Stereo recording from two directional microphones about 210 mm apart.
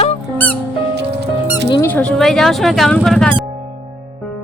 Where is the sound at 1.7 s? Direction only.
10° left (ahead or behind).